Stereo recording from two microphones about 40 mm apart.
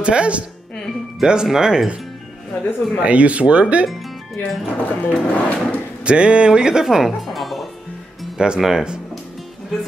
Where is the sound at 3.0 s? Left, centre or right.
Right.